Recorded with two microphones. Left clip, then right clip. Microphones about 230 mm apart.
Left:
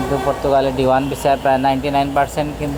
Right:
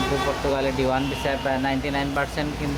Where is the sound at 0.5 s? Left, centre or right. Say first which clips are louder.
Left 12 dB; centre.